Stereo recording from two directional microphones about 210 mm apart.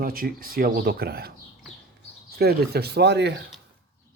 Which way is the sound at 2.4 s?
50° right (ahead or behind).